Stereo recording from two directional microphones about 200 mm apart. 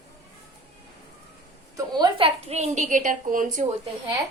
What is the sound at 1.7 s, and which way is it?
A woman's voice, 20° right (ahead or behind).